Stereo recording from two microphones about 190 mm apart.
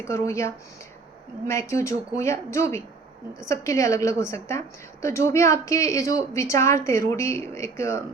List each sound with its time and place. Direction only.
0.0 s a woman's voice: 15° left (ahead or behind)